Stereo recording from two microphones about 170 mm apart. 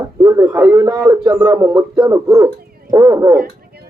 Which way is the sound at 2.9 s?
20° right (ahead or behind).